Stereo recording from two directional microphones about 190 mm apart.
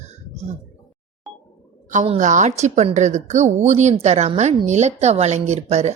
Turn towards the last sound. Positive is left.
turn(degrees=-35)  # may be behind; listen again after turning